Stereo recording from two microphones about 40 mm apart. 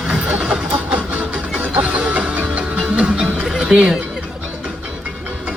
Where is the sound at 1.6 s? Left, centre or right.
Right.